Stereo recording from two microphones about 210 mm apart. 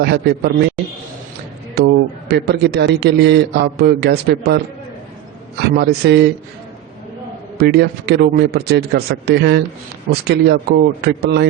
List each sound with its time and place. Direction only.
0.0 s a man's voice: 50° right (ahead or behind)
1.7 s a man's voice: 50° right (ahead or behind)
7.6 s a man's voice: 50° right (ahead or behind)